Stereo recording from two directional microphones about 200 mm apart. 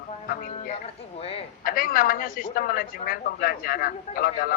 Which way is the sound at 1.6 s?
45° left (ahead or behind).